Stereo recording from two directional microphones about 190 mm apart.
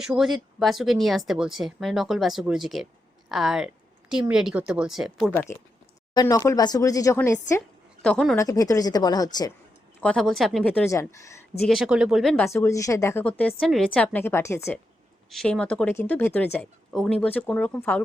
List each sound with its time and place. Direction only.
0.0 s speech: centre (ahead or behind)
5.3 s speech: 10° left (ahead or behind)
8.0 s speech: 5° left (ahead or behind)
8.4 s a woman's voice: 15° left (ahead or behind)
10.0 s speech: 5° left (ahead or behind)
11.7 s speech: centre (ahead or behind)
12.5 s speech: 15° left (ahead or behind)
15.3 s speech: 5° left (ahead or behind)